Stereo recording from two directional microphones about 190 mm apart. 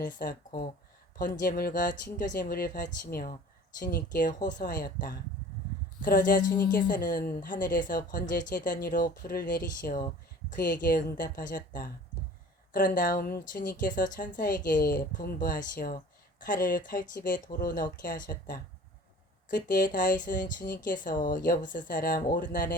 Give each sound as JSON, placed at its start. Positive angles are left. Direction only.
{"t": 0.0, "sound": "a woman's voice", "side_deg": 45}